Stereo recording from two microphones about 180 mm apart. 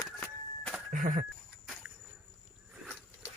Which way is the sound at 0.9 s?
50° right (ahead or behind).